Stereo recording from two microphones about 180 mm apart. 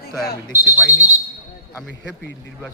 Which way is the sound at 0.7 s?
10° right (ahead or behind).